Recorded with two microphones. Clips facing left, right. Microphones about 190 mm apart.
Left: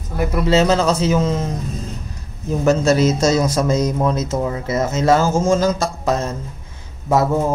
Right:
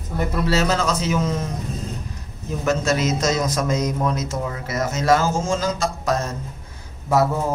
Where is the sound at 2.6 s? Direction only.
35° left (ahead or behind).